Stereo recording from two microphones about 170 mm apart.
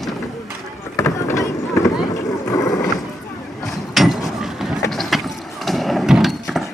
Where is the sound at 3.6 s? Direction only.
Centre (ahead or behind).